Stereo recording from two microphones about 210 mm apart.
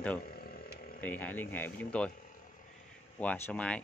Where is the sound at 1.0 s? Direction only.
10° left (ahead or behind).